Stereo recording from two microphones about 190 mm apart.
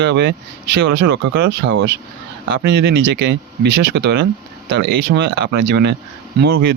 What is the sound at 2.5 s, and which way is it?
Speech, 60° right (ahead or behind).